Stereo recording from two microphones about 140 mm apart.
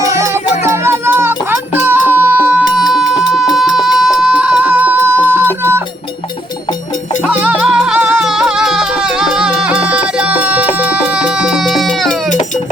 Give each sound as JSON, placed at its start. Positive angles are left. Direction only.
{"t": 0.6, "sound": "music", "side_deg": -15}
{"t": 3.5, "sound": "a sound", "side_deg": 0}
{"t": 7.3, "sound": "music", "side_deg": -5}